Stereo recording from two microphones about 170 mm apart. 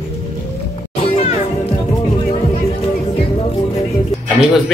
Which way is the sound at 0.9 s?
35° left (ahead or behind).